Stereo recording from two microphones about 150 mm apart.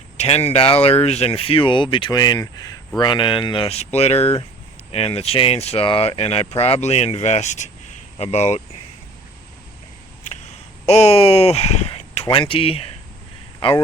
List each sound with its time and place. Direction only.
0.2 s speech: 45° left (ahead or behind)
10.8 s speech: 45° left (ahead or behind)